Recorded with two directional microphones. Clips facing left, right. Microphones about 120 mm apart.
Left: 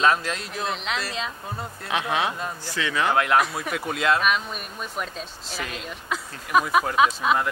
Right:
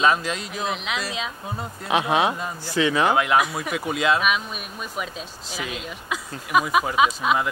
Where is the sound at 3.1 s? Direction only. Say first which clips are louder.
Right 1 dB; 5° right (ahead or behind).